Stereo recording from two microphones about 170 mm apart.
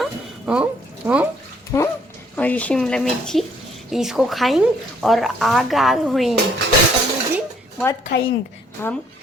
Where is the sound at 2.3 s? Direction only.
10° left (ahead or behind).